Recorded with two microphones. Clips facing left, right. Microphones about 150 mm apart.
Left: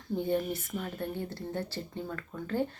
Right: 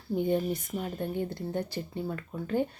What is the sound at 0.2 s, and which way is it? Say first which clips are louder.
Speech: right 3 dB; 15° right (ahead or behind).